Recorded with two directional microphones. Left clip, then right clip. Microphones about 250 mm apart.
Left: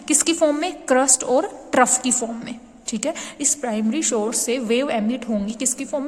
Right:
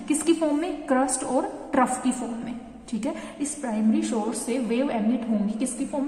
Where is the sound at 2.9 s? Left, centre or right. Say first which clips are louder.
Left 5 dB; left.